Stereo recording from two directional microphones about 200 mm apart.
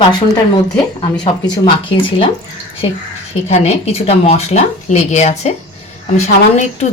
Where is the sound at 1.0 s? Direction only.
20° left (ahead or behind).